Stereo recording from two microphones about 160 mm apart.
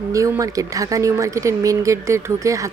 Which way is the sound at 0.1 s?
20° right (ahead or behind).